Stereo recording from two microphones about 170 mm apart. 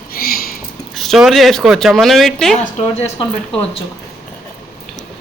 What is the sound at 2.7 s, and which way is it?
Speech, 40° left (ahead or behind).